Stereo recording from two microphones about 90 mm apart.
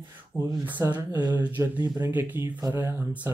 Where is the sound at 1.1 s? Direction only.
45° right (ahead or behind).